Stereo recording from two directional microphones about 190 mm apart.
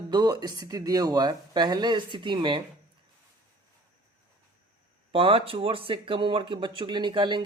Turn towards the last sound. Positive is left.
turn(degrees=-25)  # may be behind; listen again after turning